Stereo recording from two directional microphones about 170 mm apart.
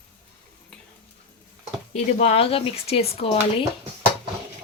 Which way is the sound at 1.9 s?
35° left (ahead or behind).